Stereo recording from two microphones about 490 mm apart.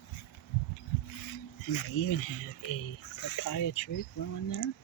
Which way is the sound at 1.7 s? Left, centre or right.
Left.